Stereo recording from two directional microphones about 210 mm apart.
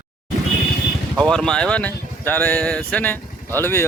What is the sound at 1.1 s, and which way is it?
Speech, 5° left (ahead or behind).